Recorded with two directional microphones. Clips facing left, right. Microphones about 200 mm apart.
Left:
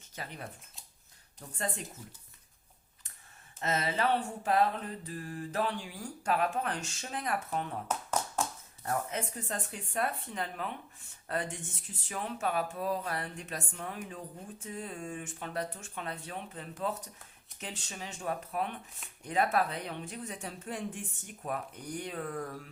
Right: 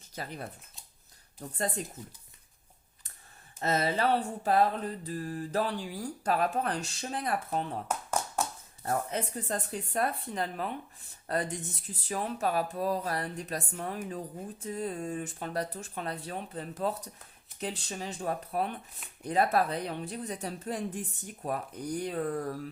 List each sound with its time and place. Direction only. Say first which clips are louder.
0.2 s mantra: right 3 dB; 35° right (ahead or behind)
3.6 s mantra: right 3 dB; 35° right (ahead or behind)
8.8 s mantra: right 3 dB; 35° right (ahead or behind)